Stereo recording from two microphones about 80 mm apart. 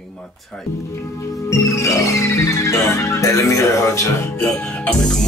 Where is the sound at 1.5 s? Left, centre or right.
Left.